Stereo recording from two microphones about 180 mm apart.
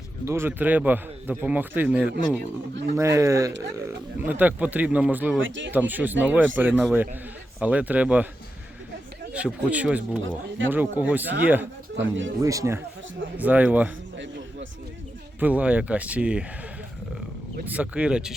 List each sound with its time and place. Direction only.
0.3 s a man's voice: 15° right (ahead or behind)
5.4 s speech: 90° right
5.7 s a man's voice: 10° right (ahead or behind)
9.3 s a man's voice: 5° right (ahead or behind)
11.9 s speech: 90° right
12.4 s a man's voice: 20° right (ahead or behind)
15.4 s a man's voice: 10° right (ahead or behind)
17.7 s a man's voice: 5° right (ahead or behind)